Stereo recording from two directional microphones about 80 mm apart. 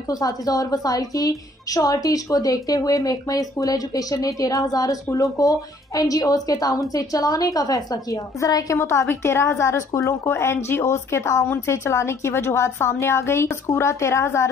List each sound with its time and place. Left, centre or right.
0.1 s a woman's voice: left
8.7 s a woman's voice: left